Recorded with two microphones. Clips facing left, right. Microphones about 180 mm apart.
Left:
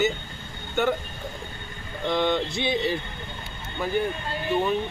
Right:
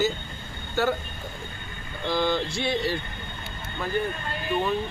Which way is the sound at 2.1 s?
Centre (ahead or behind).